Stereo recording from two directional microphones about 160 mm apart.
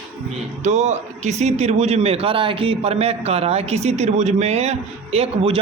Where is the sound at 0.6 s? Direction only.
45° right (ahead or behind).